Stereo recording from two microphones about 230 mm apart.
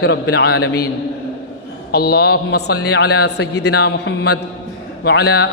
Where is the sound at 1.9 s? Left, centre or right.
Left.